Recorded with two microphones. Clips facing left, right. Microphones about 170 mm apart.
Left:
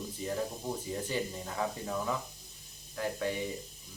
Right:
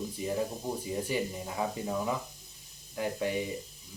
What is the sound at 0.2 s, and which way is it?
Speech, 15° right (ahead or behind).